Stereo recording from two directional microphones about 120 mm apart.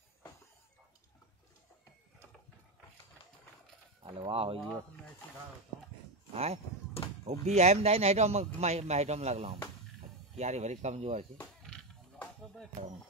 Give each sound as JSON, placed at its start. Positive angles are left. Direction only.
{"t": 4.0, "sound": "speech", "side_deg": -45}
{"t": 6.3, "sound": "speech", "side_deg": -60}